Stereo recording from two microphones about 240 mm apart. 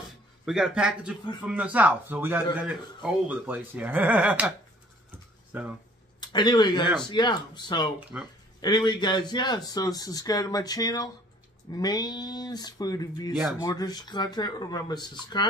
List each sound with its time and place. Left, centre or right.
0.5 s speech: centre
6.2 s speech: centre
8.1 s speech: centre
8.5 s speech: centre